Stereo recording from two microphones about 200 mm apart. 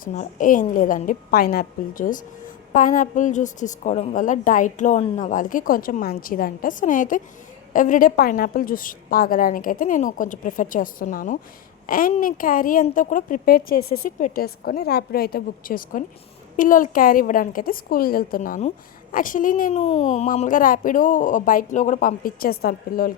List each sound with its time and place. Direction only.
0.0 s a woman's voice: 40° left (ahead or behind)